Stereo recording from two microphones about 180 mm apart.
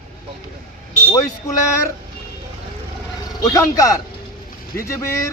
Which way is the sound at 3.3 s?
20° left (ahead or behind).